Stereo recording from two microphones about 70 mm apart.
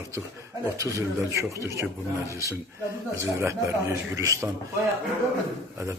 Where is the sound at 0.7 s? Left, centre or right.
Right.